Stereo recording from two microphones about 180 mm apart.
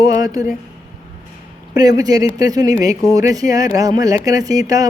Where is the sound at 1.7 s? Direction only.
20° right (ahead or behind).